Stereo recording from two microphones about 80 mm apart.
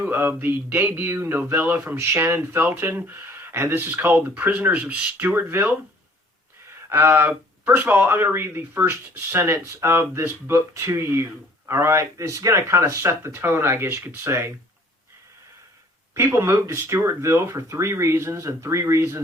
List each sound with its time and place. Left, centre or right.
0.0 s speech: right
2.0 s speech: right; by 5.3 s centre
5.3 s speech: right
6.9 s speech: right
16.1 s speech: right